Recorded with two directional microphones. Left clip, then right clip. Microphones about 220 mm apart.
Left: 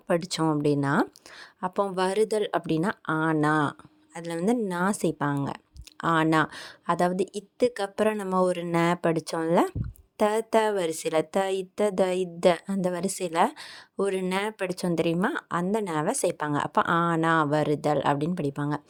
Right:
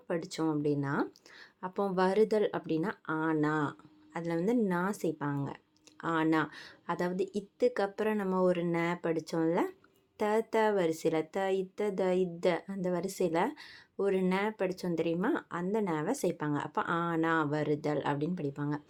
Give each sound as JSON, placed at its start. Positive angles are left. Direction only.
{"t": 0.1, "sound": "a woman's voice", "side_deg": 40}